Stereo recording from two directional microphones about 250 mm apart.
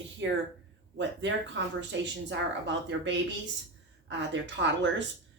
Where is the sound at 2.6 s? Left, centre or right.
Right.